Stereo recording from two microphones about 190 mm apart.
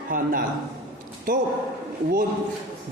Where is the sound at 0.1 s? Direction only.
45° right (ahead or behind).